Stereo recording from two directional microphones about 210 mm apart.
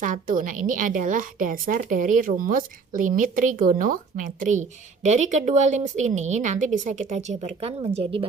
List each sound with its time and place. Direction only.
0.0 s a woman's voice: 40° right (ahead or behind)